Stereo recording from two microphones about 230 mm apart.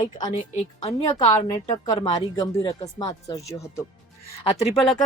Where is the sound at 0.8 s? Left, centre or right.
Left.